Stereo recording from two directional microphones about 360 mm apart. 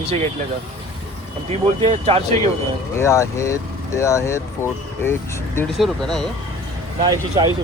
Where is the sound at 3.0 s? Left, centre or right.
Centre.